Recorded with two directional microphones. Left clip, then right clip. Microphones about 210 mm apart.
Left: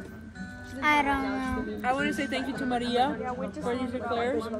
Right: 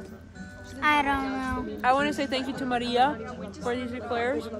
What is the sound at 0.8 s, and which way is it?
Speech, centre (ahead or behind).